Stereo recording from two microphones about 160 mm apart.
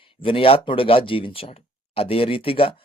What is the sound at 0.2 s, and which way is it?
Speech, 35° left (ahead or behind).